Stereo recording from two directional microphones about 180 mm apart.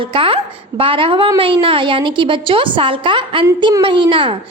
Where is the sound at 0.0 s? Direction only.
30° right (ahead or behind).